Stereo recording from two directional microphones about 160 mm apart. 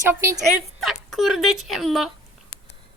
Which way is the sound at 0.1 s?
15° right (ahead or behind).